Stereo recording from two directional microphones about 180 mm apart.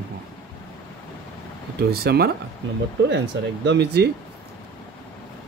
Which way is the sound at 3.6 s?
65° right (ahead or behind).